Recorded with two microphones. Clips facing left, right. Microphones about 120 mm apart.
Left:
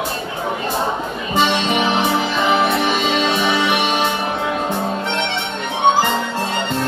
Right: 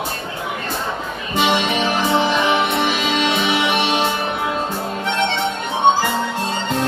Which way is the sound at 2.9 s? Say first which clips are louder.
Left 2 dB; 5° right (ahead or behind).